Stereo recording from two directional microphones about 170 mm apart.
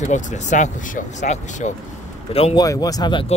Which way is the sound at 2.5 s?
20° left (ahead or behind).